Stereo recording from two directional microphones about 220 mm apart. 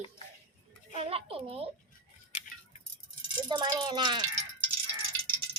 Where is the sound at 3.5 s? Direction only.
20° right (ahead or behind).